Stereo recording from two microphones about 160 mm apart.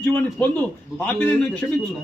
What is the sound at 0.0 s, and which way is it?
A man's voice, 10° left (ahead or behind).